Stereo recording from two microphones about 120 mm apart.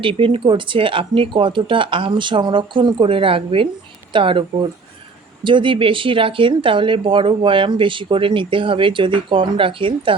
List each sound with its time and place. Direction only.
0.0 s speech: 45° right (ahead or behind)